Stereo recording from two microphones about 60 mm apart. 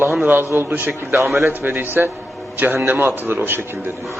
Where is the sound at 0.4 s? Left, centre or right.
Right.